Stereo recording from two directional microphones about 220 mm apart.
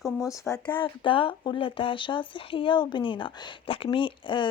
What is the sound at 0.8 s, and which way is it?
Speech, 25° left (ahead or behind).